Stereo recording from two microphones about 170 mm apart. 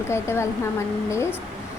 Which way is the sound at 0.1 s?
15° left (ahead or behind).